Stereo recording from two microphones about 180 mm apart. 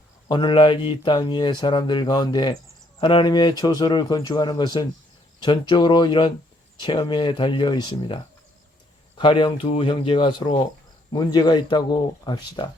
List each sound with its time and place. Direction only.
0.3 s speech: 25° left (ahead or behind)